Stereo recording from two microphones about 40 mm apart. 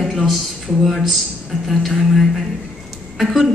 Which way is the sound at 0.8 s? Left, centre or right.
Centre.